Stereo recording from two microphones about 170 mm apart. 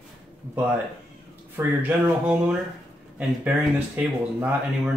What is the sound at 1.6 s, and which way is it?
Speech, 10° right (ahead or behind).